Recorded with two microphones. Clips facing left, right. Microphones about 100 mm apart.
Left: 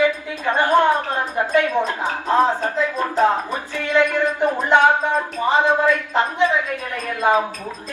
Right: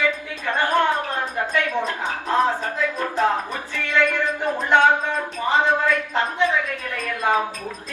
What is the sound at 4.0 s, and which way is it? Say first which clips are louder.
Speech: left 4 dB; 20° left (ahead or behind).